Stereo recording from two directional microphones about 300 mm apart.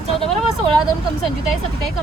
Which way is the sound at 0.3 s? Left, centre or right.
Centre.